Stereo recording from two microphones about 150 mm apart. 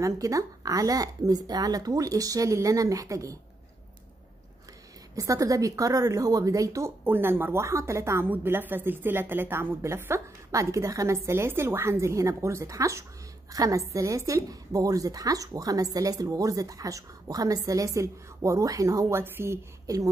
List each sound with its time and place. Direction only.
0.0 s a woman's voice: 20° right (ahead or behind)
5.1 s a woman's voice: 20° right (ahead or behind)